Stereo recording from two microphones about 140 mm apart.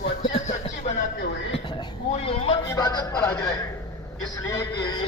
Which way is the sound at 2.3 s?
40° left (ahead or behind).